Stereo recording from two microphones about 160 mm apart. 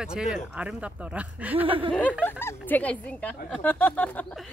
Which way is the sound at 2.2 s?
15° left (ahead or behind).